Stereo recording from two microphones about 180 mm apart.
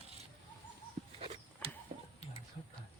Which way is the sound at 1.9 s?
35° right (ahead or behind).